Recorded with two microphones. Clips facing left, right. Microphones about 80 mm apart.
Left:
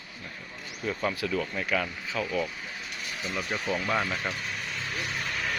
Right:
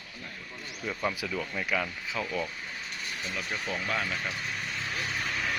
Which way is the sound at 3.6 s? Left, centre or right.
Centre.